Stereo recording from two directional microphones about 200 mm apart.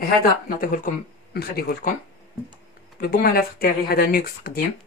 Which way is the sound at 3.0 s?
50° left (ahead or behind).